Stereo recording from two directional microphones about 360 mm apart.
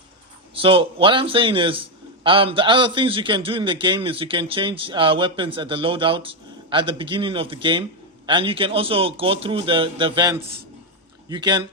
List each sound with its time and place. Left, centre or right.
0.5 s a man's voice: centre
10.4 s a man's voice: right
11.3 s a man's voice: centre